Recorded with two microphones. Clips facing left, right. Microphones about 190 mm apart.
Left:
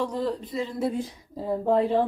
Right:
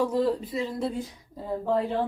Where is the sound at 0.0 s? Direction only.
5° right (ahead or behind).